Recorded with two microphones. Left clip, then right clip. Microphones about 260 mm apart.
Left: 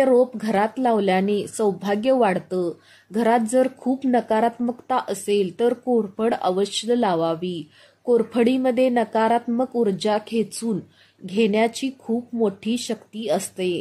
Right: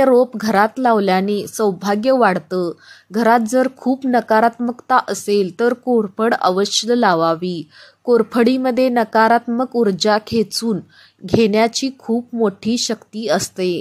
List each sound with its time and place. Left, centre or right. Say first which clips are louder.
0.0 s a woman's voice: right 4 dB; centre